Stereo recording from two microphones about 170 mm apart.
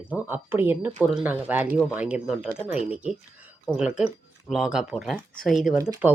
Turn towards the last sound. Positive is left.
turn(degrees=-15)  # may be behind; listen again after turning